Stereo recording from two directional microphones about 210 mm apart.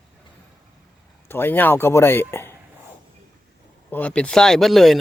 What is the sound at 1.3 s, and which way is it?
Speech, 10° left (ahead or behind).